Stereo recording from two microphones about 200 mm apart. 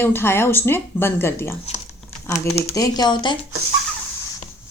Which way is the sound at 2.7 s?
20° left (ahead or behind).